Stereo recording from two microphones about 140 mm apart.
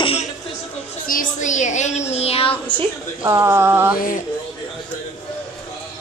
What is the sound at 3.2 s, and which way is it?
Mantra, 20° right (ahead or behind).